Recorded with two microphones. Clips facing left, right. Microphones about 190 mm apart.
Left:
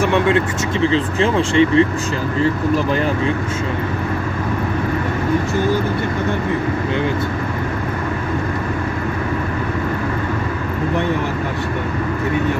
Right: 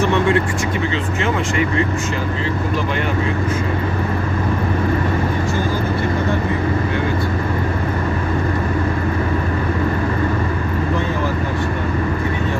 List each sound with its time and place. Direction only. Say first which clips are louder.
1.2 s speech: left 5 dB; 30° left (ahead or behind)